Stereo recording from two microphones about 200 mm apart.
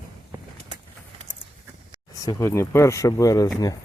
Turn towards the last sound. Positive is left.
turn(degrees=15)  # may be behind; listen again after turning